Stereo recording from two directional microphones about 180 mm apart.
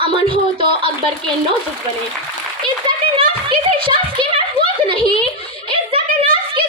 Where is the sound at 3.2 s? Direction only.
30° right (ahead or behind).